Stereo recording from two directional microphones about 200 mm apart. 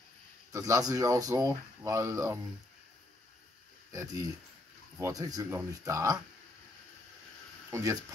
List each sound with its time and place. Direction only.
0.5 s speech: 15° right (ahead or behind)
3.9 s speech: 15° right (ahead or behind)
7.7 s speech: 15° right (ahead or behind)